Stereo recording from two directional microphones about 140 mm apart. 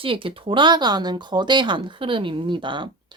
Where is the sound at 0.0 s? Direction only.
40° right (ahead or behind).